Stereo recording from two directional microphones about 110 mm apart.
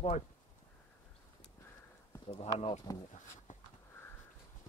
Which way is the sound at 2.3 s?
70° left (ahead or behind).